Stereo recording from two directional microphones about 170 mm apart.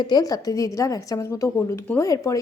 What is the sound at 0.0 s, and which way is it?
A woman's voice, 25° left (ahead or behind).